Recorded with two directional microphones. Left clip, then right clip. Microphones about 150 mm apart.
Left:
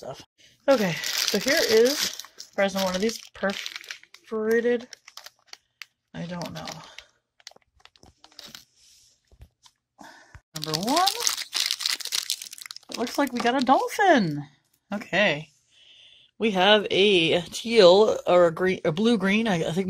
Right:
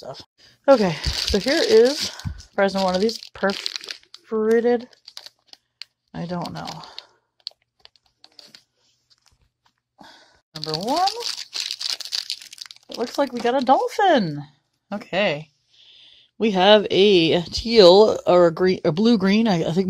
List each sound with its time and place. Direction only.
0.0 s speech: centre (ahead or behind)
0.4 s speech: 30° right (ahead or behind)
6.1 s speech: 40° right (ahead or behind)
6.4 s speech: 15° right (ahead or behind)
8.2 s tearing: 25° right (ahead or behind)
9.9 s a sound: centre (ahead or behind)
12.6 s crumpling: 45° right (ahead or behind)
13.0 s speech: centre (ahead or behind)
16.1 s speech: 40° right (ahead or behind)